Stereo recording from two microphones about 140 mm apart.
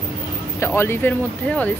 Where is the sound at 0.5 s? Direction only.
20° left (ahead or behind).